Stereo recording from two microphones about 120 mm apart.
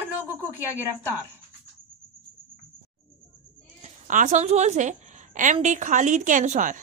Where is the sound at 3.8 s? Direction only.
80° right.